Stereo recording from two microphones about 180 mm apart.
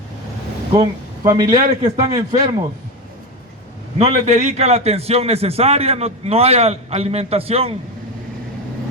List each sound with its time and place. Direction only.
0.8 s a man's voice: 25° right (ahead or behind)
3.9 s a man's voice: 35° right (ahead or behind)